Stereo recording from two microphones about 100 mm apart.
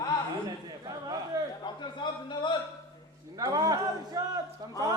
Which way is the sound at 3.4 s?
35° right (ahead or behind).